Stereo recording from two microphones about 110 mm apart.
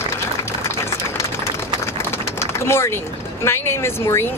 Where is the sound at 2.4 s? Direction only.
25° left (ahead or behind).